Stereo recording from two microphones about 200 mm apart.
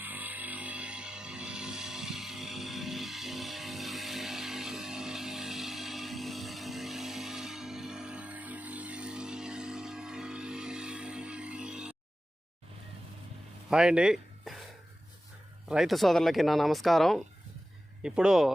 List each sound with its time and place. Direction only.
0.0 s music: 10° right (ahead or behind)
13.7 s a sound: 5° right (ahead or behind)
15.7 s speech: centre (ahead or behind)